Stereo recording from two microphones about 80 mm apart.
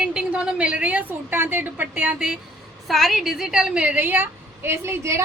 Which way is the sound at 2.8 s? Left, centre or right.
Centre.